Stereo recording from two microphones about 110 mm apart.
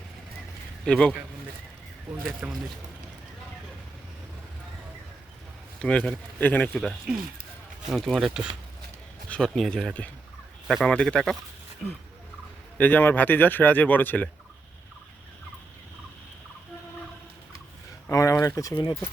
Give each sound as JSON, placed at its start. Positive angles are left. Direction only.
{"t": 0.9, "sound": "speech", "side_deg": 10}
{"t": 2.4, "sound": "speech", "side_deg": -10}
{"t": 5.8, "sound": "speech", "side_deg": 10}
{"t": 7.1, "sound": "a man's voice", "side_deg": -5}
{"t": 9.3, "sound": "a man's voice", "side_deg": 5}
{"t": 12.7, "sound": "speech", "side_deg": 15}
{"t": 18.1, "sound": "speech", "side_deg": 30}